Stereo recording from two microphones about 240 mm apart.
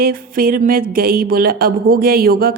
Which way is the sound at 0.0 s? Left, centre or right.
Right.